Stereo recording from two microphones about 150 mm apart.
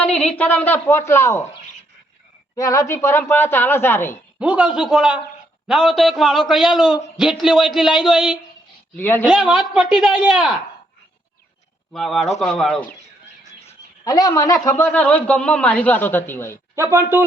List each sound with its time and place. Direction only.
0.3 s speech: 10° left (ahead or behind)
2.6 s speech: 20° left (ahead or behind)
4.4 s a man's voice: 10° right (ahead or behind)
9.0 s speech: 15° left (ahead or behind)
9.2 s a woman's voice: 5° right (ahead or behind)
11.9 s a woman's voice: centre (ahead or behind)
14.0 s speech: 25° left (ahead or behind)
16.7 s a man's voice: 15° right (ahead or behind)